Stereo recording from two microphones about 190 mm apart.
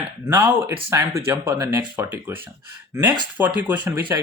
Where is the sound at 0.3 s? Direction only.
15° right (ahead or behind).